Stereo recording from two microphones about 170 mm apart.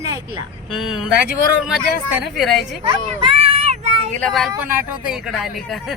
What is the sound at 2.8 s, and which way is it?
Children playing, 30° right (ahead or behind).